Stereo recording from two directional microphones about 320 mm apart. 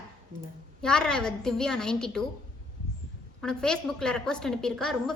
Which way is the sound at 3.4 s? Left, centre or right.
Centre.